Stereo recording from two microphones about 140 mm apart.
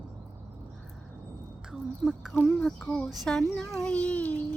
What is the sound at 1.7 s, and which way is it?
Speech, 5° right (ahead or behind).